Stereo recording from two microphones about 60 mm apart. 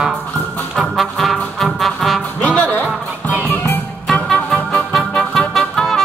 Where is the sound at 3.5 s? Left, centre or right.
Left.